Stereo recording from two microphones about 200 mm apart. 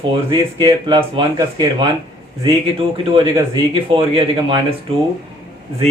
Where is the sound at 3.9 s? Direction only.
25° right (ahead or behind).